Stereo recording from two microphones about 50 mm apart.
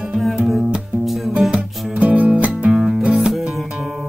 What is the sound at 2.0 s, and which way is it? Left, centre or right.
Music, right.